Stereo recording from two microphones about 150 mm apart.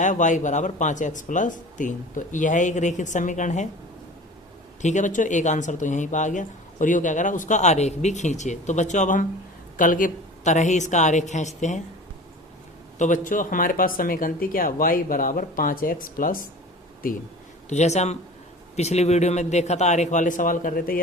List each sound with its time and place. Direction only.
0.0 s speech: 55° left (ahead or behind)
4.8 s speech: 50° left (ahead or behind)
13.0 s speech: 60° left (ahead or behind)
17.7 s speech: 50° left (ahead or behind); by 21.0 s 70° left (ahead or behind)